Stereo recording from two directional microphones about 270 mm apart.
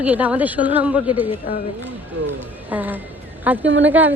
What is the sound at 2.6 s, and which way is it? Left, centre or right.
Speech, centre.